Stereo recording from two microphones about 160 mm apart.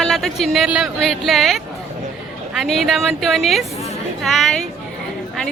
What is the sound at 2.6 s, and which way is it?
A woman's voice, centre (ahead or behind).